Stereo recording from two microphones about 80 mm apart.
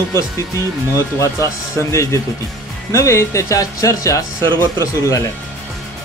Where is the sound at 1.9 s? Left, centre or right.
Left.